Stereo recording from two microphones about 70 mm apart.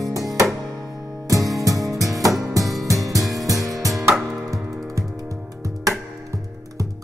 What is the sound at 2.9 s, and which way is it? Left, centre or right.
Music, right.